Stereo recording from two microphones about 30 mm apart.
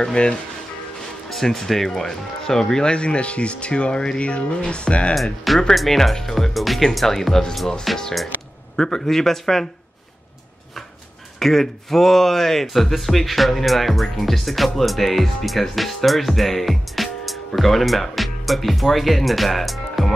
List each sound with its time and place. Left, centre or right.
0.0 s speech: left
1.3 s speech: centre; by 4.2 s left
4.2 s speech: left
5.1 s speech: centre
6.5 s speech: centre
7.1 s speech: centre
8.7 s speech: left
11.3 s speech: centre